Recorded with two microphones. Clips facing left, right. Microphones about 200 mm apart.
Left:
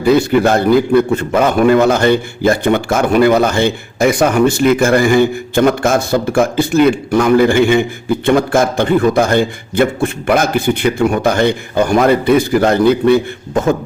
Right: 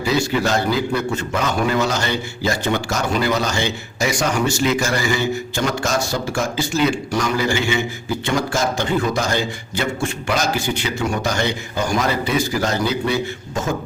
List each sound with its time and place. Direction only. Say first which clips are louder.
0.0 s a man's voice: left 9 dB; 55° left (ahead or behind)